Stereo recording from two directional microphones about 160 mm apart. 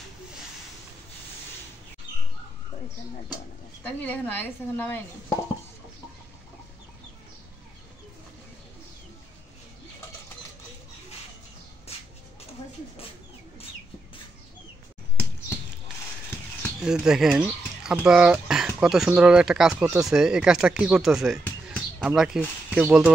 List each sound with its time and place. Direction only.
3.8 s speech: 10° left (ahead or behind)
16.8 s speech: 5° right (ahead or behind)